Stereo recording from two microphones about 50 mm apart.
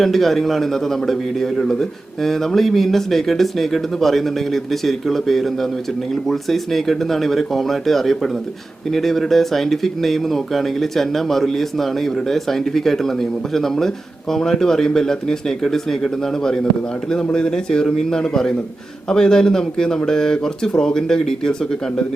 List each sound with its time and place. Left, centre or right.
0.0 s a man's voice: centre